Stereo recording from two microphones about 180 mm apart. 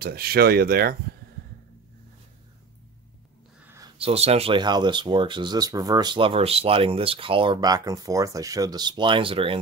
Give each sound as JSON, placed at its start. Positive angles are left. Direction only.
{"t": 0.0, "sound": "speech", "side_deg": -60}
{"t": 3.6, "sound": "a sound", "side_deg": -15}
{"t": 4.0, "sound": "speech", "side_deg": -35}